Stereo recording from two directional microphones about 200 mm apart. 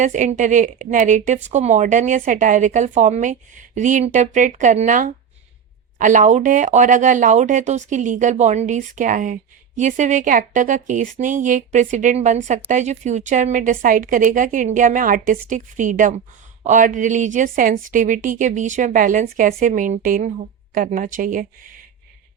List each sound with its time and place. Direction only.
0.0 s a woman's voice: 35° right (ahead or behind)